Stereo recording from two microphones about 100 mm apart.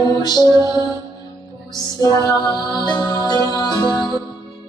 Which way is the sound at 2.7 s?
45° left (ahead or behind).